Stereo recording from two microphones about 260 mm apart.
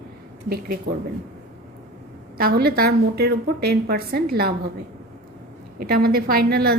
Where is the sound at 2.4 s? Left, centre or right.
Right.